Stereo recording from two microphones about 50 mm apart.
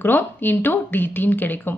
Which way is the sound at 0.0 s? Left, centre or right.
Left.